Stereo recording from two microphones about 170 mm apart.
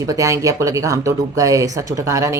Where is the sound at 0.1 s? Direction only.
20° right (ahead or behind).